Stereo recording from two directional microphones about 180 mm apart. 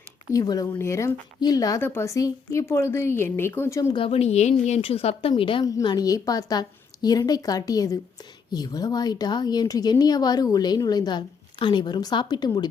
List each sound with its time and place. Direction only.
0.3 s a woman's voice: 20° left (ahead or behind)
3.9 s a woman's voice: 30° left (ahead or behind)